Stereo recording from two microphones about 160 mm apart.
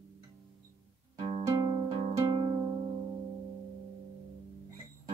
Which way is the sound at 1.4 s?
20° right (ahead or behind).